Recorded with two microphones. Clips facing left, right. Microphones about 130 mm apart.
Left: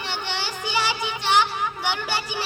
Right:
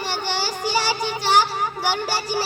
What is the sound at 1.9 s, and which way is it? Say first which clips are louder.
Speech: right 3 dB; 40° right (ahead or behind).